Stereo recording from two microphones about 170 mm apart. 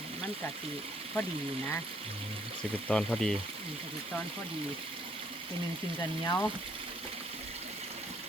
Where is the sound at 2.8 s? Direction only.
5° left (ahead or behind).